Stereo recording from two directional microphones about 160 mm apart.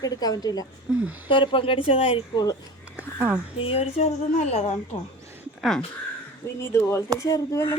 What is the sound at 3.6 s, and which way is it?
A woman's voice, 35° left (ahead or behind).